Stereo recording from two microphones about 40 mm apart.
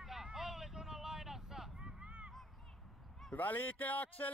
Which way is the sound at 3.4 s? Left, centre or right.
Left.